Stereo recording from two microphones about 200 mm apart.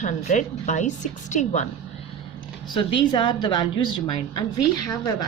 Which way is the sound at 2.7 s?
25° left (ahead or behind).